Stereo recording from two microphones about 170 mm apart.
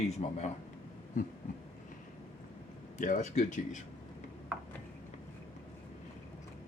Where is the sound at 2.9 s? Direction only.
50° left (ahead or behind).